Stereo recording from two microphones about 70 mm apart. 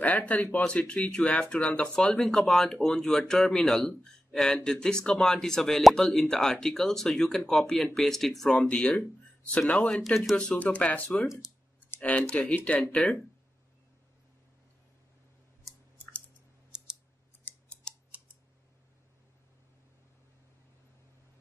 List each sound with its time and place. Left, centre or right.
0.0 s speech: left; by 8.5 s centre
8.5 s speech: centre
10.0 s speech: centre
10.3 s speech: centre
17.9 s scissors: centre